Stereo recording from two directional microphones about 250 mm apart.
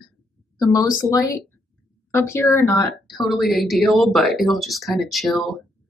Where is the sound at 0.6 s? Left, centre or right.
Centre.